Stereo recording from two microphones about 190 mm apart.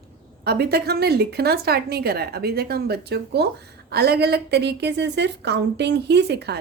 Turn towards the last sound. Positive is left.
turn(degrees=-60)  # may be behind; listen again after turning